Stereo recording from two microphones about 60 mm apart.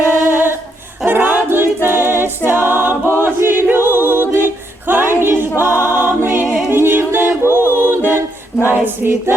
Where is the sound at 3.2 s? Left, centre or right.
Right.